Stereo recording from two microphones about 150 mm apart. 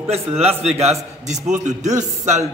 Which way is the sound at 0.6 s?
45° right (ahead or behind).